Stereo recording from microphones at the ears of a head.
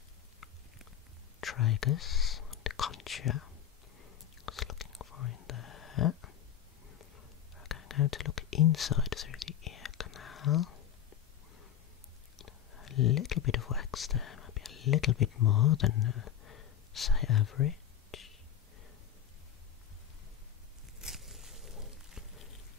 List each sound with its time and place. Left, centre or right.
1.4 s whispering: left
7.5 s whispering: left
12.4 s whispering: left
21.0 s a sound: centre